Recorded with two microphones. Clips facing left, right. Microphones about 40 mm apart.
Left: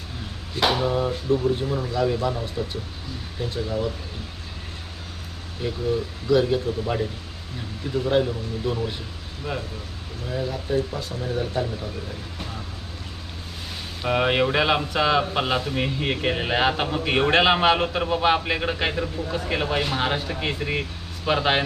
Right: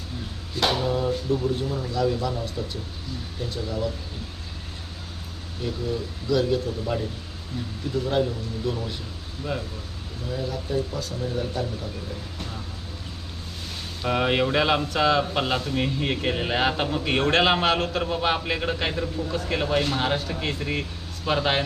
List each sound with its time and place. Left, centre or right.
0.6 s speech: centre
5.6 s speech: centre
12.4 s vehicle: centre
14.0 s speech: centre